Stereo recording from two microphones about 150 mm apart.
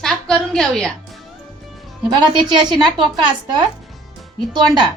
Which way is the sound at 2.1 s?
35° right (ahead or behind).